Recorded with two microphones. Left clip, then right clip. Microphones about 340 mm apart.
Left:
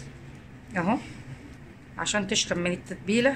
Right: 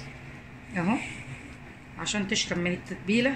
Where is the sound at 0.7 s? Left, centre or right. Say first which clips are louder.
Left 3 dB; left.